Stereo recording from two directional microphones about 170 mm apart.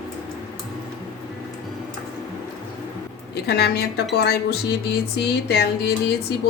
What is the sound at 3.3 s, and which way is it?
A woman's voice, 70° left (ahead or behind).